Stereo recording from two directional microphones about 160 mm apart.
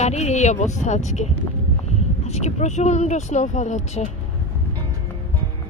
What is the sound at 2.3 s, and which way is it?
Speech, 45° left (ahead or behind).